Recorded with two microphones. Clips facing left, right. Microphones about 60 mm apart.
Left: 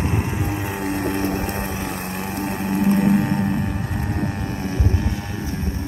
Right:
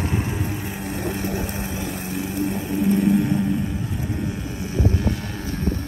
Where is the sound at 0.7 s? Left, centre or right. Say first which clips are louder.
Left 4 dB; left.